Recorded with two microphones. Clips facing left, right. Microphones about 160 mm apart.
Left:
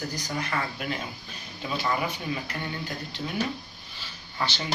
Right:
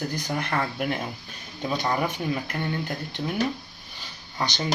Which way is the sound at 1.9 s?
45° right (ahead or behind).